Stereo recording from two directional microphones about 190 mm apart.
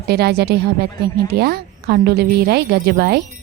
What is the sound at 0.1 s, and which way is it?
A woman's voice, 55° right (ahead or behind).